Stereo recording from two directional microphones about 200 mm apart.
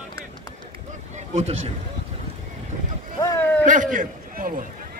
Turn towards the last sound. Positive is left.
turn(degrees=-45)  # may be behind; listen again after turning